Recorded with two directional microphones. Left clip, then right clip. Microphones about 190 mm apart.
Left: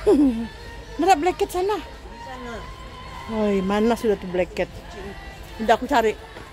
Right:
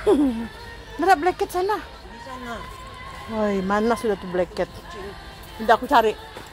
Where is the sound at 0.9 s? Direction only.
15° left (ahead or behind).